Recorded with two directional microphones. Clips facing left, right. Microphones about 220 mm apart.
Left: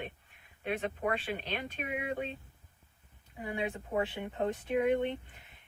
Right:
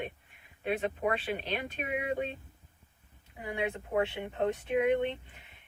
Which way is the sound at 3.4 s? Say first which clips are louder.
Right 2 dB; 15° right (ahead or behind).